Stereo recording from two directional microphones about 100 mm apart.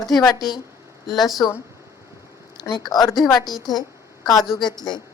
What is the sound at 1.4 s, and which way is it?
Speech, 45° left (ahead or behind).